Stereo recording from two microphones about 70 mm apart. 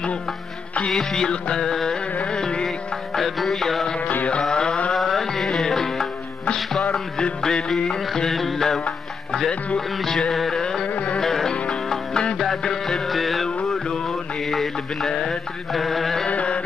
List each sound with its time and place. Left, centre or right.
0.8 s music: centre
4.1 s music: left
4.4 s mantra: centre
4.9 s music: centre
16.3 s carnatic music: centre